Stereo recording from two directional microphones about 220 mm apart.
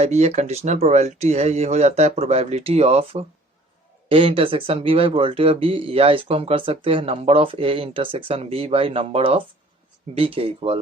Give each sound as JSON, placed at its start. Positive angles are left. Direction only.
{"t": 0.0, "sound": "speech", "side_deg": -30}